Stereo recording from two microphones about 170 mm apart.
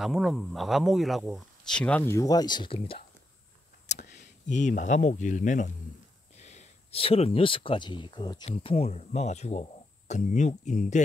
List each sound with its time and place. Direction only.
0.0 s speech: centre (ahead or behind); by 3.1 s 35° left (ahead or behind)
3.9 s speech: 45° left (ahead or behind); by 8.5 s 25° left (ahead or behind)
8.5 s speech: 40° left (ahead or behind)